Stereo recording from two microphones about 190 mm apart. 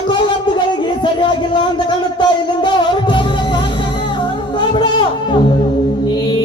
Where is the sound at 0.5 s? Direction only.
25° left (ahead or behind).